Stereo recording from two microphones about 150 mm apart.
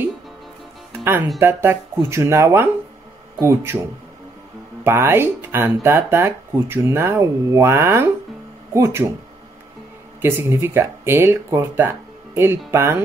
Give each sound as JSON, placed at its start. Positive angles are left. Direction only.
{"t": 1.0, "sound": "speech", "side_deg": -15}
{"t": 4.8, "sound": "speech", "side_deg": -15}
{"t": 10.2, "sound": "speech", "side_deg": -15}